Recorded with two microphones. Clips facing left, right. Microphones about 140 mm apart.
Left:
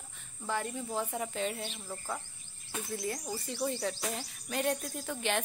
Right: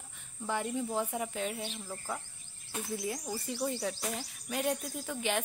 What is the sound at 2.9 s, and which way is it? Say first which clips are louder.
Speech: even; 5° right (ahead or behind).